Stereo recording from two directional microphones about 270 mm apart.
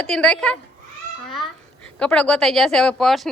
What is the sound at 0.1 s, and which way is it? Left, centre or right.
Speech, centre.